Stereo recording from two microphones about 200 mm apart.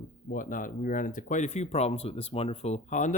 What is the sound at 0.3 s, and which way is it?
Speech, 40° left (ahead or behind).